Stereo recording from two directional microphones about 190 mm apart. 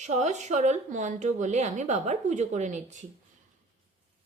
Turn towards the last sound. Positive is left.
turn(degrees=-40)  # may be behind; listen again after turning